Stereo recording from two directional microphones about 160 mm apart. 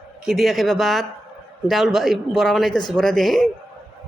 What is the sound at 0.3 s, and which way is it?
A woman's voice, centre (ahead or behind).